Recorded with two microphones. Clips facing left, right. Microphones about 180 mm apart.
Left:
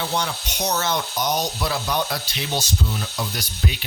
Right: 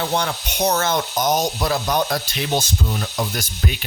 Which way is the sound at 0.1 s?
55° right (ahead or behind).